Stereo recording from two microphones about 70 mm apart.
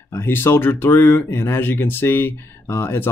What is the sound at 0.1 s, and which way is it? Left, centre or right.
Speech, left.